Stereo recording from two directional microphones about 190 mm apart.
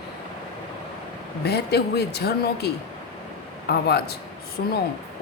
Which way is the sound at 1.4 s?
60° left (ahead or behind).